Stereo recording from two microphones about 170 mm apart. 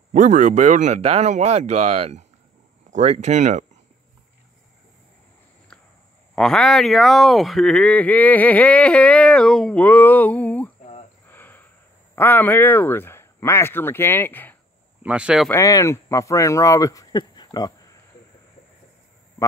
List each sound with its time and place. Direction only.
0.1 s speech: 50° right (ahead or behind)
5.7 s a sound: 5° left (ahead or behind)
6.3 s speech: 5° left (ahead or behind)
11.2 s a sound: 10° left (ahead or behind)
12.2 s speech: 10° left (ahead or behind)
15.0 s speech: 5° right (ahead or behind)
15.4 s speech: 15° left (ahead or behind)